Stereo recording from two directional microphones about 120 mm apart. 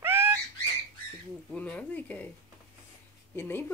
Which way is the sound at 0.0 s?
20° right (ahead or behind).